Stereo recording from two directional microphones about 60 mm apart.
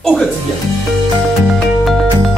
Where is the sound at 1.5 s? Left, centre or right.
Centre.